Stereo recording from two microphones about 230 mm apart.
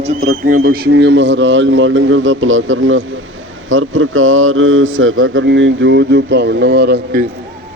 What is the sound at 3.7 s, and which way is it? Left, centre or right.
Mantra, right.